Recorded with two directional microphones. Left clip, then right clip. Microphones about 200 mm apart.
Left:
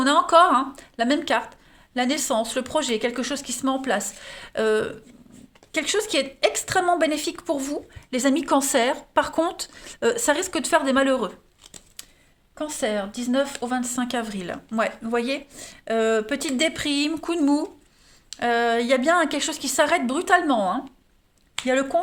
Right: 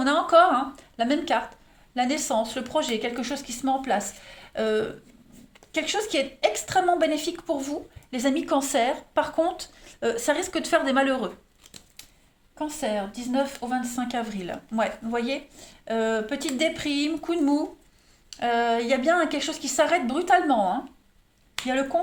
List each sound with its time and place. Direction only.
0.0 s a woman's voice: 45° left (ahead or behind)
12.5 s a woman's voice: 55° left (ahead or behind)